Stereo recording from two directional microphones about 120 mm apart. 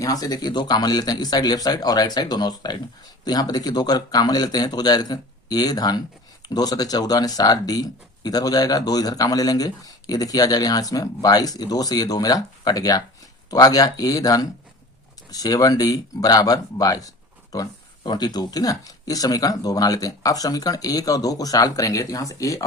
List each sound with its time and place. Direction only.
0.0 s speech: 30° left (ahead or behind)